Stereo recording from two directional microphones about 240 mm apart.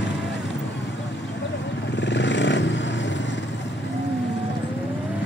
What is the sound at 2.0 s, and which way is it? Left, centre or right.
Vehicle, left.